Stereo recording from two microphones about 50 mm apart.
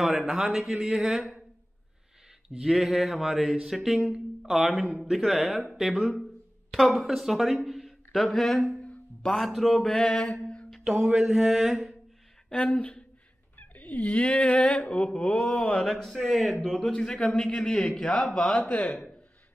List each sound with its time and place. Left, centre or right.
0.0 s speech: centre
0.5 s mantra: centre
2.6 s a sound: centre
6.7 s speech: centre
8.8 s music: centre
9.5 s speech: centre
10.4 s a sound: centre
10.8 s a sound: centre
11.1 s mantra: centre
12.4 s speech: left
13.6 s a sound: left
14.2 s speech: centre
18.7 s speech: left